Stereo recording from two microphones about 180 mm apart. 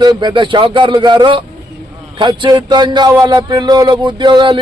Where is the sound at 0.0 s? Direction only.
25° right (ahead or behind).